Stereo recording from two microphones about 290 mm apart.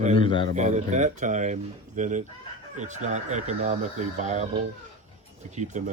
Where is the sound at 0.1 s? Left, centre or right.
Centre.